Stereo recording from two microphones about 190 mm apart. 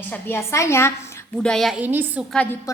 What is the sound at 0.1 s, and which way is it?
A woman's voice, 15° left (ahead or behind).